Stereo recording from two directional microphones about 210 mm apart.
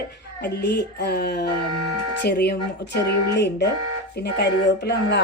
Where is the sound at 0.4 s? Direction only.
50° left (ahead or behind).